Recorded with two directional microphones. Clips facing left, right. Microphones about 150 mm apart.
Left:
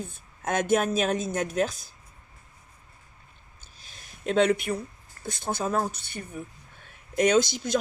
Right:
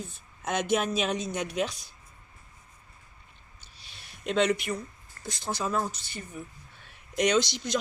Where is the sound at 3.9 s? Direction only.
45° left (ahead or behind).